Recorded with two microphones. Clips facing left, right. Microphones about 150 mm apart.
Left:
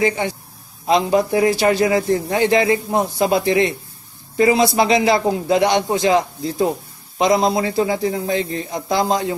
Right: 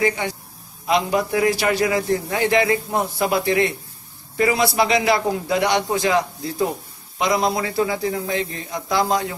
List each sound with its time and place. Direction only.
0.8 s a man's voice: 30° left (ahead or behind)